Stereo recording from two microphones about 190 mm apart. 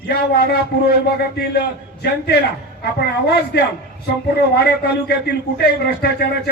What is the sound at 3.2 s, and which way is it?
Speech, 60° left (ahead or behind).